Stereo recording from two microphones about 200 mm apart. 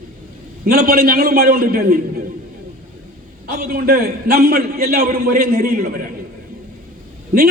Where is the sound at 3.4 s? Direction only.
50° right (ahead or behind).